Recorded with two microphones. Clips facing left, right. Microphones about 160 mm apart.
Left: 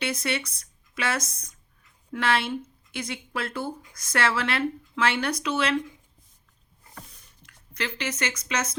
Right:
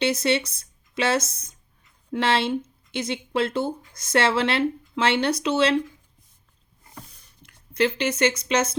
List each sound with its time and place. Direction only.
0.0 s speech: 25° right (ahead or behind)
0.6 s a sound: 25° right (ahead or behind)
1.3 s speech: 25° right (ahead or behind)
7.4 s speech: 30° right (ahead or behind)